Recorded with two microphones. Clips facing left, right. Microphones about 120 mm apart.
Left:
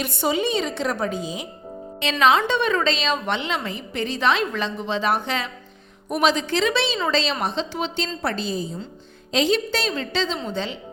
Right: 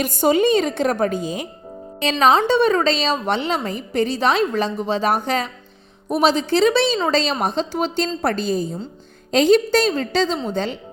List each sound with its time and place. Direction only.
0.0 s a woman's voice: 45° right (ahead or behind)